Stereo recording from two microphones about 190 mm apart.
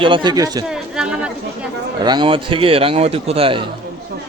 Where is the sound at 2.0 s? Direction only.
25° right (ahead or behind).